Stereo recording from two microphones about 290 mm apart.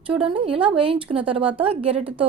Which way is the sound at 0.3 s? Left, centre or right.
Centre.